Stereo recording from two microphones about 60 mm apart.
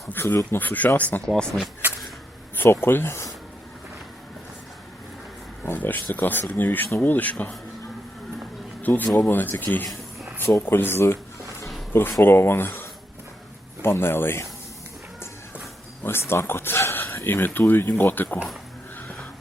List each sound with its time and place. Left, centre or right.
0.1 s speech: left
1.2 s speech: centre
2.6 s speech: left
5.6 s speech: left
8.8 s speech: left
12.2 s speech: left
16.0 s speech: left